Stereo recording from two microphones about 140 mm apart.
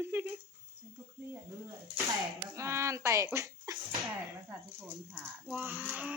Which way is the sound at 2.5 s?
20° right (ahead or behind).